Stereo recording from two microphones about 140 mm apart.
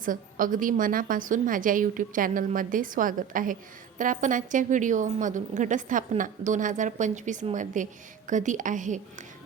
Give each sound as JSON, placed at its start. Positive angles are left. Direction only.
{"t": 0.0, "sound": "a woman's voice", "side_deg": -75}